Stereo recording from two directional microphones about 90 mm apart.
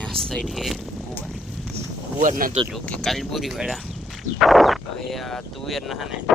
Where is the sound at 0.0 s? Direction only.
5° left (ahead or behind).